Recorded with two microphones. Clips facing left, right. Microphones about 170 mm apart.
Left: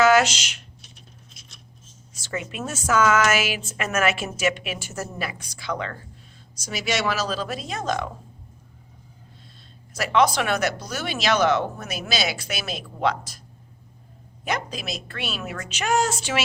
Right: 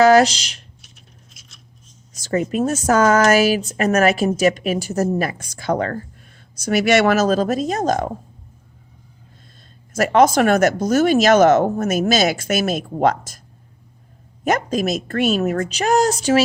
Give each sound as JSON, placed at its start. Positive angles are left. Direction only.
{"t": 0.0, "sound": "speech", "side_deg": -35}
{"t": 2.1, "sound": "a woman's voice", "side_deg": -40}
{"t": 9.9, "sound": "speech", "side_deg": -45}
{"t": 14.4, "sound": "speech", "side_deg": -45}